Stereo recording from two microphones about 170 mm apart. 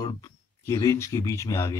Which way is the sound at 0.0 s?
20° left (ahead or behind).